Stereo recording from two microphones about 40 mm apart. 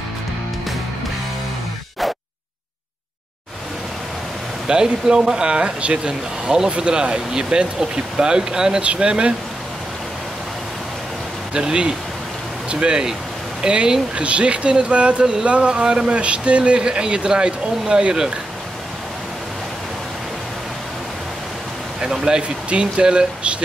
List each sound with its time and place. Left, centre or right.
4.6 s speech: right
11.5 s speech: right
22.1 s speech: centre